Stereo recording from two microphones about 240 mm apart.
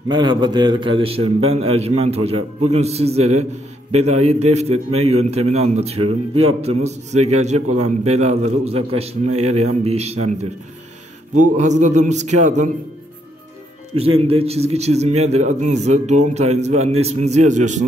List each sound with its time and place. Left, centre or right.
0.1 s a man's voice: centre
11.5 s a man's voice: right
13.9 s a man's voice: right